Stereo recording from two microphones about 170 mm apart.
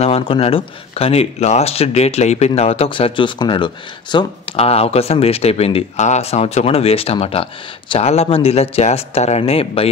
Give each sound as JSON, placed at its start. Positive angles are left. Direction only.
{"t": 0.0, "sound": "speech", "side_deg": 35}